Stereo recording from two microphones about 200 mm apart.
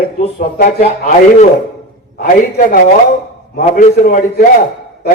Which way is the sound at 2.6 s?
40° left (ahead or behind).